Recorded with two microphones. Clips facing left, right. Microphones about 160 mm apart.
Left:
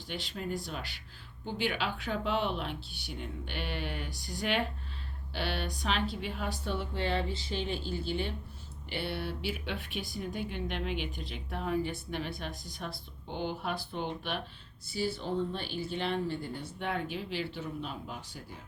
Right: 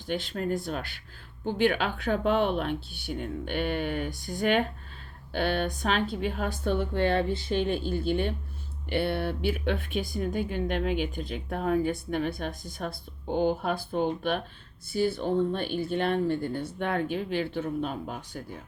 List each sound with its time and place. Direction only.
0.1 s speech: 50° right (ahead or behind)